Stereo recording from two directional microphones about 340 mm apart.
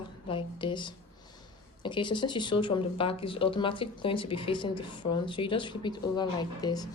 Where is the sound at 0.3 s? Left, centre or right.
Centre.